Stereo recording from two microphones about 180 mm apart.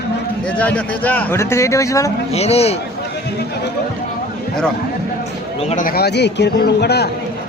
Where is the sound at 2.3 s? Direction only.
35° left (ahead or behind).